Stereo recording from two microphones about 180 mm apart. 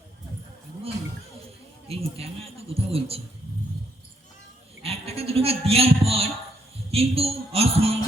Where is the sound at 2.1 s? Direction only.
35° right (ahead or behind).